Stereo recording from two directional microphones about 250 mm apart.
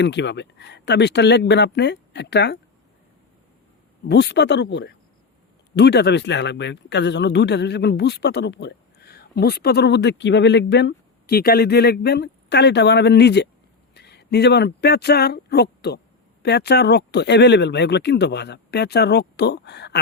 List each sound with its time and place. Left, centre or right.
0.0 s speech: left
4.1 s speech: left